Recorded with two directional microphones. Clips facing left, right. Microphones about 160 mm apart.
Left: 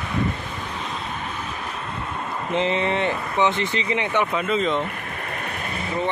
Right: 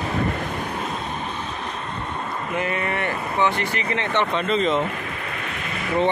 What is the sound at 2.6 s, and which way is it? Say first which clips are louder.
Speech: left 4 dB; 20° left (ahead or behind).